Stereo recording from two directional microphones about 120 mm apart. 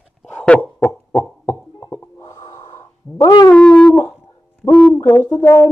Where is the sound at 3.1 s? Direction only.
30° left (ahead or behind).